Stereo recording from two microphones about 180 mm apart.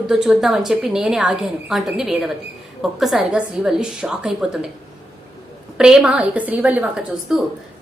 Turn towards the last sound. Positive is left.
turn(degrees=0)  # may be behind; listen again after turning